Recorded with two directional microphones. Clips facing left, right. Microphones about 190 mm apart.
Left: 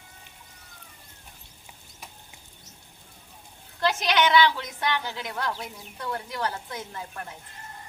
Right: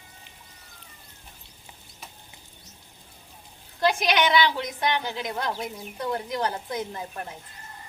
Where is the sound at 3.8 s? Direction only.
15° right (ahead or behind).